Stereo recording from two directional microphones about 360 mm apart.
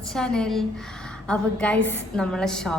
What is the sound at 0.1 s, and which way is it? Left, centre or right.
A woman's voice, centre.